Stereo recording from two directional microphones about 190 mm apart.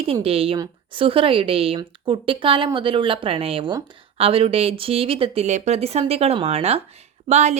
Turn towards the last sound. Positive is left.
turn(degrees=-35)  # may be behind; listen again after turning